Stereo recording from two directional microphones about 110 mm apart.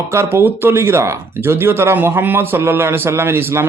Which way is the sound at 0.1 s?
25° right (ahead or behind).